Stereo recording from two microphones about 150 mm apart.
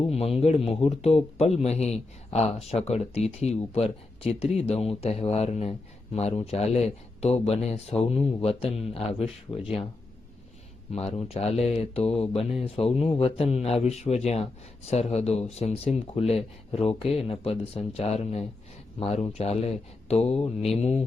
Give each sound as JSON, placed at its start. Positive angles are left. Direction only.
{"t": 0.0, "sound": "speech", "side_deg": 40}
{"t": 10.9, "sound": "speech", "side_deg": 45}